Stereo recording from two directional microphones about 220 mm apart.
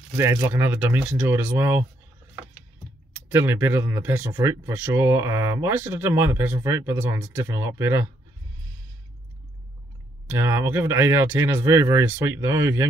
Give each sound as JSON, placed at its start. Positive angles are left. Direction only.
{"t": 0.2, "sound": "speech", "side_deg": -10}
{"t": 3.3, "sound": "speech", "side_deg": -10}
{"t": 10.2, "sound": "speech", "side_deg": -10}